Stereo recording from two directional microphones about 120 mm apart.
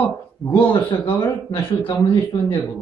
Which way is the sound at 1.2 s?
40° left (ahead or behind).